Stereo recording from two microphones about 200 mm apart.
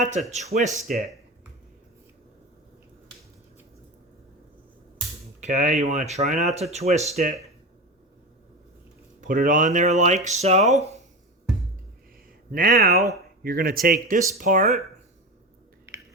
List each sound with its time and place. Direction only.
0.0 s speech: 35° right (ahead or behind)
5.4 s speech: 40° right (ahead or behind)
9.2 s speech: 45° right (ahead or behind)
12.5 s a man's voice: 45° right (ahead or behind)